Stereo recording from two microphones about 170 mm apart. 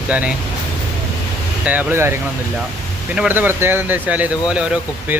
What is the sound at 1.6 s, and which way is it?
Speech, 10° right (ahead or behind).